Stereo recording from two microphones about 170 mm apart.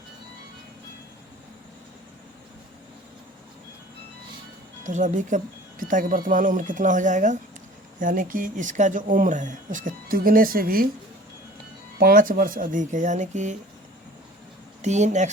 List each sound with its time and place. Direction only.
4.8 s speech: 45° right (ahead or behind)
11.9 s speech: 60° right (ahead or behind)
14.8 s speech: 45° right (ahead or behind)